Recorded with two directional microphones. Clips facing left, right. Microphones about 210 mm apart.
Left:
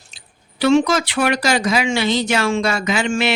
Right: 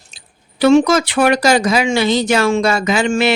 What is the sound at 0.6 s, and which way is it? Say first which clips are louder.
Speech: right 4 dB; 45° right (ahead or behind).